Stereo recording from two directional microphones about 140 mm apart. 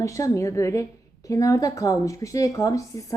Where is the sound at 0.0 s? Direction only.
20° left (ahead or behind).